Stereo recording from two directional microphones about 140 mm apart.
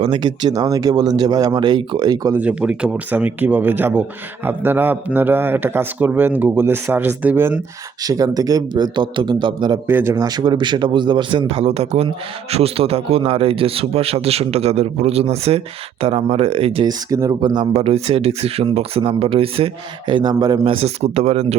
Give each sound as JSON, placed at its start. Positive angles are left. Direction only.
{"t": 0.0, "sound": "speech", "side_deg": -35}
{"t": 2.4, "sound": "speech", "side_deg": -10}
{"t": 8.0, "sound": "speech", "side_deg": -25}
{"t": 9.8, "sound": "speech", "side_deg": -15}
{"t": 16.8, "sound": "speech", "side_deg": -25}
{"t": 17.7, "sound": "speech", "side_deg": -45}
{"t": 20.8, "sound": "speech", "side_deg": -50}